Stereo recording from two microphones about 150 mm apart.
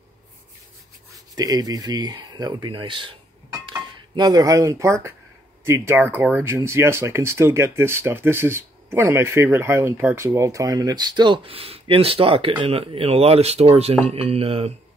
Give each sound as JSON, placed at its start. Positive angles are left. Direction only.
{"t": 1.3, "sound": "speech", "side_deg": -25}